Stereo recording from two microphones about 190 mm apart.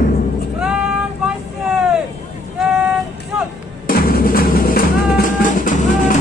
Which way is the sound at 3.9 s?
50° left (ahead or behind).